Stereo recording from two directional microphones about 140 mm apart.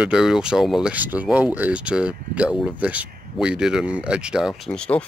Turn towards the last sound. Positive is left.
turn(degrees=5)  # may be behind; listen again after turning